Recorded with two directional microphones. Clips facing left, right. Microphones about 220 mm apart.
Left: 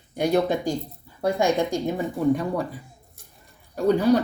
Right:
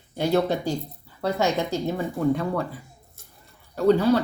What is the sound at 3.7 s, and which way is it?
Speech, 15° left (ahead or behind).